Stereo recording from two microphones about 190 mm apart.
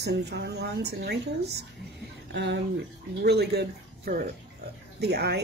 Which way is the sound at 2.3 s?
65° right (ahead or behind).